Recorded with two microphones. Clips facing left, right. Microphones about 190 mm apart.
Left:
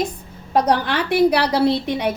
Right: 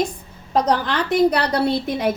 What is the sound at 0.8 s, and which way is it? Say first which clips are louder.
Speech: left 1 dB; 10° left (ahead or behind).